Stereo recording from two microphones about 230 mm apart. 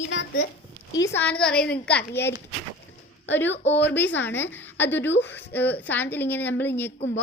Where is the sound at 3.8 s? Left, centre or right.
Centre.